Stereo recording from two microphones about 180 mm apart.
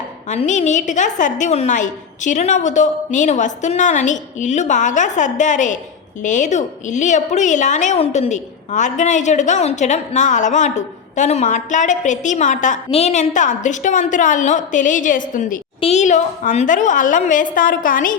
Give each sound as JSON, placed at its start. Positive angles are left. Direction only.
{"t": 0.3, "sound": "a woman's voice", "side_deg": 40}
{"t": 15.8, "sound": "a woman's voice", "side_deg": 40}